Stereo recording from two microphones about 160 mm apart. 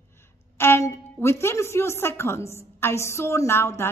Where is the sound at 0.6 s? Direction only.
15° left (ahead or behind).